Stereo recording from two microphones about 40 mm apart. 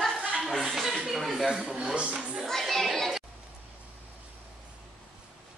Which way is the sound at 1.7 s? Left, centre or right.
Right.